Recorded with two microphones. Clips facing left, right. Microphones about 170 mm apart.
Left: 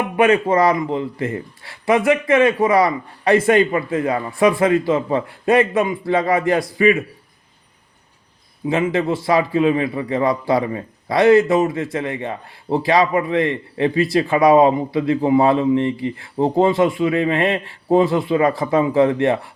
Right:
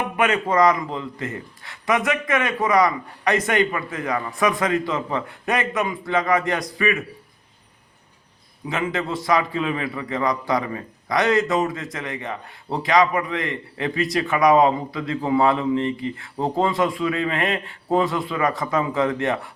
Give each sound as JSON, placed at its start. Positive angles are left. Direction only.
{"t": 0.2, "sound": "a man's voice", "side_deg": 30}
{"t": 8.6, "sound": "a man's voice", "side_deg": 25}